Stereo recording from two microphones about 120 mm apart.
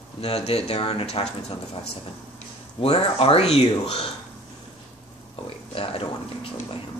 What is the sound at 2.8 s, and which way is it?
Speech, 55° left (ahead or behind).